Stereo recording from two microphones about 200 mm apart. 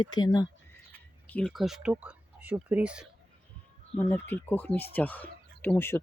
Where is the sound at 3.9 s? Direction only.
10° left (ahead or behind).